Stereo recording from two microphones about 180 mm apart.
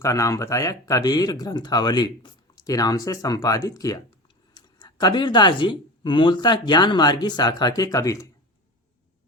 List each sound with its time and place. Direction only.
0.0 s speech: 15° left (ahead or behind)